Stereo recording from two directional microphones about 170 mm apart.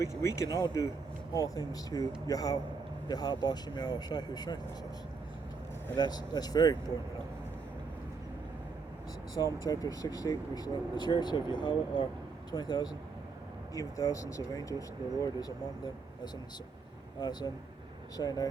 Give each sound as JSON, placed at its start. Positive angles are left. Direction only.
{"t": 0.0, "sound": "speech", "side_deg": 15}
{"t": 6.0, "sound": "speech", "side_deg": 25}
{"t": 9.3, "sound": "speech", "side_deg": 20}
{"t": 17.2, "sound": "speech", "side_deg": 25}